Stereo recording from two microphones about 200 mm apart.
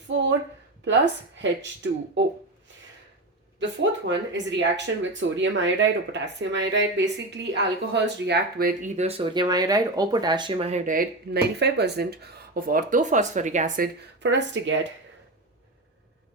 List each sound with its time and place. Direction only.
0.1 s a sound: 65° right (ahead or behind)
1.4 s speech: 65° right (ahead or behind)
3.6 s speech: 60° right (ahead or behind)
9.0 s speech: 30° right (ahead or behind)
14.2 s speech: 65° right (ahead or behind)